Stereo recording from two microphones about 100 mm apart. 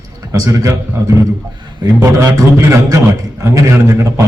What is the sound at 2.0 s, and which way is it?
Speech, 30° right (ahead or behind).